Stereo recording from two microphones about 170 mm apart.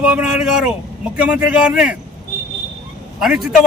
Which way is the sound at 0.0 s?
5° right (ahead or behind).